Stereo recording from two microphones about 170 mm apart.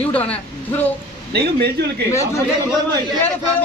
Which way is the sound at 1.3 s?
75° right (ahead or behind).